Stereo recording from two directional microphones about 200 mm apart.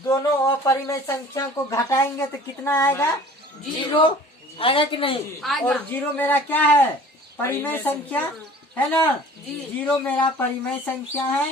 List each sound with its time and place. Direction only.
0.0 s speech: 15° left (ahead or behind)
3.8 s speech: 25° left (ahead or behind)
5.4 s speech: 5° left (ahead or behind)